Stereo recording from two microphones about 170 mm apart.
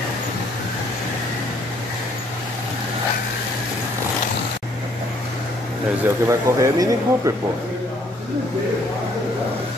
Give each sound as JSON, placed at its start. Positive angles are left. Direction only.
{"t": 6.2, "sound": "speech", "side_deg": -20}